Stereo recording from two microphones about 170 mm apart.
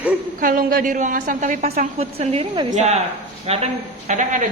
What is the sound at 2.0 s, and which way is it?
A woman's voice, 35° right (ahead or behind).